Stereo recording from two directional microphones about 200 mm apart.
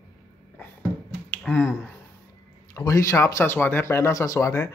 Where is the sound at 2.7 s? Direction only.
15° left (ahead or behind).